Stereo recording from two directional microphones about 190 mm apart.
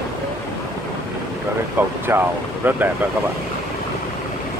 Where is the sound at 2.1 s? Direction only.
10° right (ahead or behind).